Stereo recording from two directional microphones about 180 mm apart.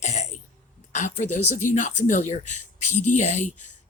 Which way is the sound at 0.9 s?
40° left (ahead or behind).